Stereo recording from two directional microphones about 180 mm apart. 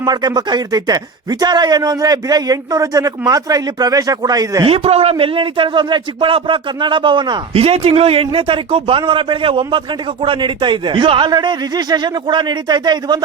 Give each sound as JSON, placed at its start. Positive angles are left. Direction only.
{"t": 0.0, "sound": "speech", "side_deg": -25}
{"t": 4.7, "sound": "speech", "side_deg": -35}